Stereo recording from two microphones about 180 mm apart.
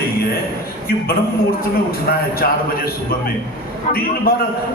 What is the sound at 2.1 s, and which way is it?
Speech, 60° left (ahead or behind).